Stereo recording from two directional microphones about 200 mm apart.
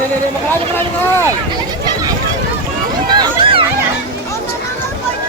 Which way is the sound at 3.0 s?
20° right (ahead or behind).